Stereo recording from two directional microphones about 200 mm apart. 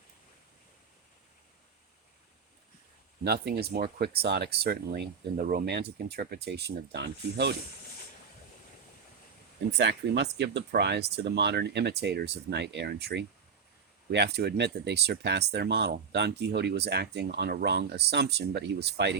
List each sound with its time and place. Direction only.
3.2 s speech: 55° right (ahead or behind)
9.7 s speech: 60° right (ahead or behind)